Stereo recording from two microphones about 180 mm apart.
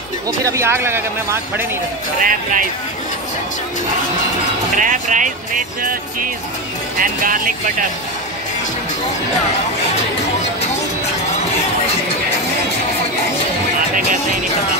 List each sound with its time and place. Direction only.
0.3 s speech: 20° right (ahead or behind)
2.2 s speech: 50° right (ahead or behind)
4.7 s speech: 45° right (ahead or behind)